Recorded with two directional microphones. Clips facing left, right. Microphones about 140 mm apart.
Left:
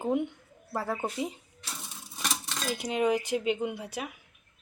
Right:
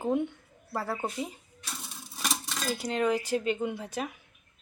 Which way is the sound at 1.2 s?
20° left (ahead or behind).